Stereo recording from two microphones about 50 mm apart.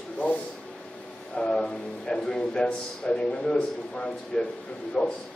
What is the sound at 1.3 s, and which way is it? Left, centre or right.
A man's voice, centre.